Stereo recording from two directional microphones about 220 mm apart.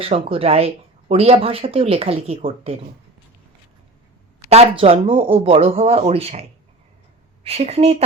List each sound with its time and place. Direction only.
0.0 s speech: 25° right (ahead or behind)
4.4 s speech: 30° right (ahead or behind)
7.4 s speech: 30° right (ahead or behind)